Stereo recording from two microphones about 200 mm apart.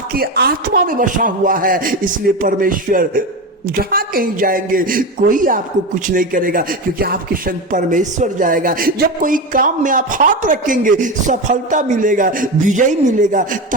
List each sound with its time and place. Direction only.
0.2 s speech: 50° right (ahead or behind)